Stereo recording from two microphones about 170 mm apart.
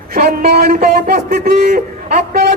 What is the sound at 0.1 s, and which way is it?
A man's voice, 70° right (ahead or behind).